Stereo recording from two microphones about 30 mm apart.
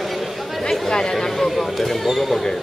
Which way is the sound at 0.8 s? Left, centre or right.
Left.